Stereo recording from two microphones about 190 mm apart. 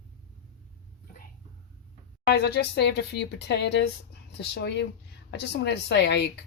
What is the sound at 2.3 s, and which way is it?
Speech, 60° left (ahead or behind).